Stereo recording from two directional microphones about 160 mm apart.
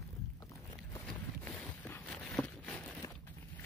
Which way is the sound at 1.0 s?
5° left (ahead or behind).